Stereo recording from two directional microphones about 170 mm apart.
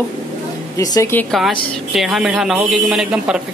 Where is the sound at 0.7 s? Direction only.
20° left (ahead or behind).